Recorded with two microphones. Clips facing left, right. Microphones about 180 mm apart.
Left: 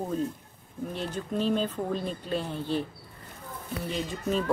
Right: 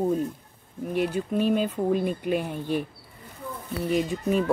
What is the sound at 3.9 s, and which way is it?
Speech, 10° right (ahead or behind).